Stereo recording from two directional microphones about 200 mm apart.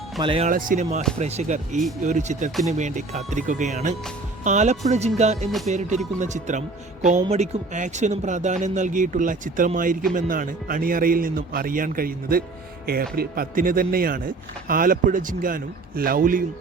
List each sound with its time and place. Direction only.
0.2 s speech: 25° right (ahead or behind)
0.5 s speech: 40° right (ahead or behind)